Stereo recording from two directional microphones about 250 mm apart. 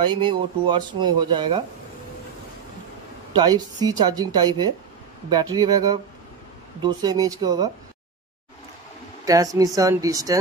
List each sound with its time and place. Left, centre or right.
0.0 s speech: centre
3.3 s speech: centre
9.2 s speech: centre